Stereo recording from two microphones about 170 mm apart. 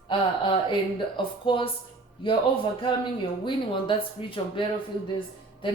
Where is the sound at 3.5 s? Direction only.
30° left (ahead or behind).